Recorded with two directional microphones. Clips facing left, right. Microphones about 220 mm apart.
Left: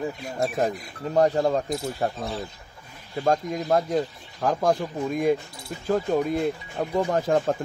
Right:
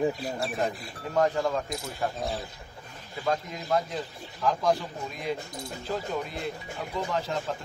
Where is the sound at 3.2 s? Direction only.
45° left (ahead or behind).